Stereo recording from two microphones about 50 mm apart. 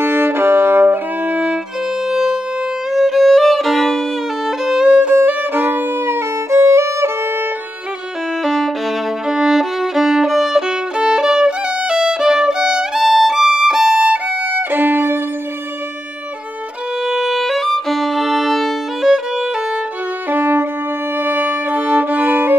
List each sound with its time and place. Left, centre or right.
0.0 s music: right
2.0 s siren: centre
2.9 s violin: centre
4.5 s violin: centre
4.8 s music: right
5.1 s violin: right
8.5 s violin: centre
9.3 s violin: centre
13.0 s violin: centre
13.9 s violin: right
17.0 s violin: centre
19.0 s violin: centre
20.2 s violin: right